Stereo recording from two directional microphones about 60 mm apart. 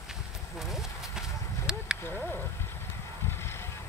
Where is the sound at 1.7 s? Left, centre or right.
Centre.